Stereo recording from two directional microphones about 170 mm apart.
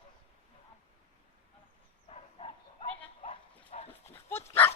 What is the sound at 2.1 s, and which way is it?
Bow-wow, 35° left (ahead or behind).